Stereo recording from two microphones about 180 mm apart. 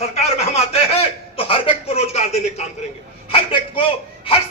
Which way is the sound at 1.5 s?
35° left (ahead or behind).